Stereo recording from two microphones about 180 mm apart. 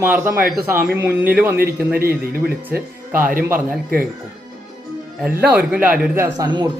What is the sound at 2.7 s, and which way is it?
Speech, 10° right (ahead or behind).